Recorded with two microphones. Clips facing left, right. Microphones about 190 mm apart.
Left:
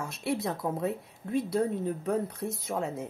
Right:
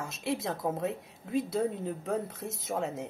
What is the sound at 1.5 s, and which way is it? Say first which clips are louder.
Speech: left 2 dB; 5° right (ahead or behind).